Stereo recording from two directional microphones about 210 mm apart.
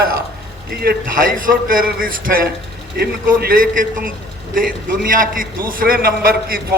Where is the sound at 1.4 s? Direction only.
40° right (ahead or behind).